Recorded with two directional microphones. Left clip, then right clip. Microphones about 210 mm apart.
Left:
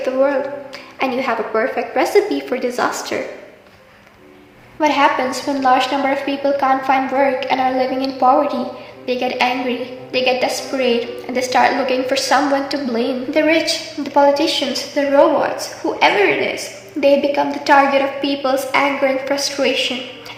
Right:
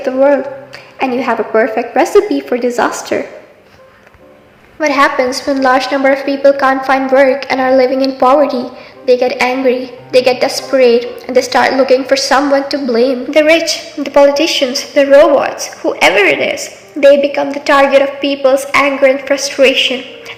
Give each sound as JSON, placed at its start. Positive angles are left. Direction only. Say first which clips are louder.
{"t": 0.0, "sound": "a woman's voice", "louder": "right 6 dB", "side_deg": -10}
{"t": 4.8, "sound": "a woman's voice", "louder": "right 4 dB", "side_deg": -20}